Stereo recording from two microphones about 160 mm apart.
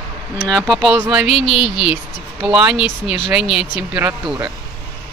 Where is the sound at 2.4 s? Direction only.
5° right (ahead or behind).